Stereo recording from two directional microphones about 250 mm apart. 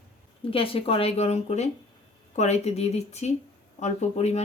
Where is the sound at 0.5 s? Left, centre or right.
Left.